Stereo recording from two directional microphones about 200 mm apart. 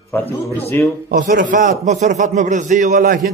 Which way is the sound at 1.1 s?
45° right (ahead or behind).